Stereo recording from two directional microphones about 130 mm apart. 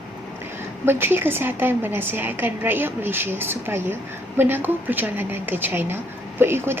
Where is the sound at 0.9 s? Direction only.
15° right (ahead or behind).